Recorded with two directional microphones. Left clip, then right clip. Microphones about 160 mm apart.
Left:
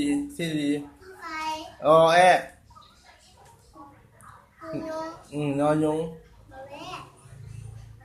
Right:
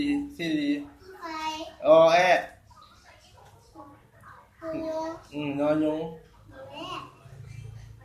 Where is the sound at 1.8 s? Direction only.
60° left (ahead or behind).